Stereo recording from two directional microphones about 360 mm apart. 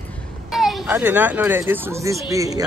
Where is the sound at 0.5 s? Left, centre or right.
Centre.